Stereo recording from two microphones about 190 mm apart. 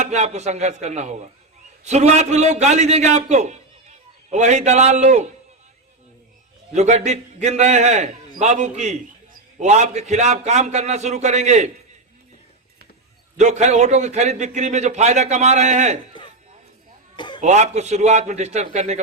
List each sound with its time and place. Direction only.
0.0 s a man's voice: 35° right (ahead or behind)
6.7 s a man's voice: 35° right (ahead or behind)
13.3 s a man's voice: 40° right (ahead or behind)
17.2 s a sound: 25° left (ahead or behind)
17.4 s a man's voice: 35° right (ahead or behind)